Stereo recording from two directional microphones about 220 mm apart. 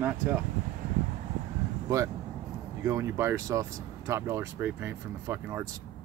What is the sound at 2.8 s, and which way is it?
Speech, 15° right (ahead or behind).